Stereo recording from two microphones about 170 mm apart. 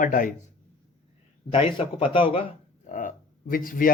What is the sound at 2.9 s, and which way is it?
Speech, 50° left (ahead or behind).